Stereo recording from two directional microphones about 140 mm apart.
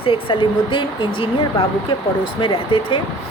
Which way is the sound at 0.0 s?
40° left (ahead or behind).